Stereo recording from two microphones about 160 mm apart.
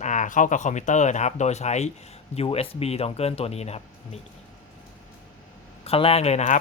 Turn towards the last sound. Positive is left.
turn(degrees=45)  # may be behind; listen again after turning